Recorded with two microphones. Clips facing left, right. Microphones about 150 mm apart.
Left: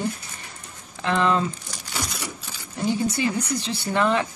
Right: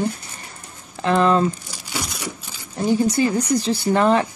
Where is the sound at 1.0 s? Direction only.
40° right (ahead or behind).